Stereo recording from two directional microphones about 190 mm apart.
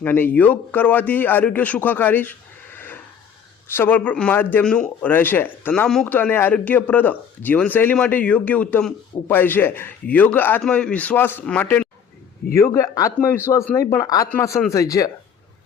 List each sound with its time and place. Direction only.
0.0 s a man's voice: 10° left (ahead or behind)
2.7 s a sound: 10° left (ahead or behind)
3.7 s a man's voice: 10° left (ahead or behind)